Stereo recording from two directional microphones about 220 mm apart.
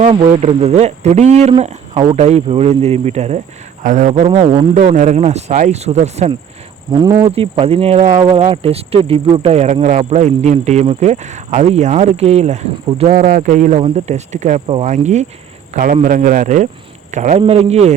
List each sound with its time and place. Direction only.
0.0 s speech: 30° right (ahead or behind)
7.0 s speech: 20° right (ahead or behind)
8.2 s speech: 20° right (ahead or behind)